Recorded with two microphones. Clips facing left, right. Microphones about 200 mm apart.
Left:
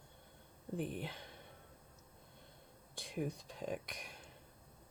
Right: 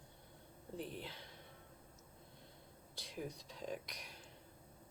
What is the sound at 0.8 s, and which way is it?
Speech, 55° left (ahead or behind).